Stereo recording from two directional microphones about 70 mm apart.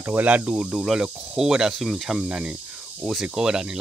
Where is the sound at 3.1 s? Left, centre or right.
Centre.